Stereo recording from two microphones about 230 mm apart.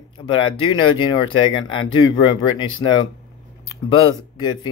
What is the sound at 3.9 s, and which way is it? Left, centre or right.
Speech, centre.